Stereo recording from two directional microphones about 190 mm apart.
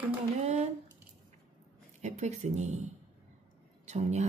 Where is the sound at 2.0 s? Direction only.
35° right (ahead or behind).